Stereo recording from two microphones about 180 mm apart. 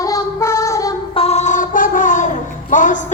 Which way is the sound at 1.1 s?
35° left (ahead or behind).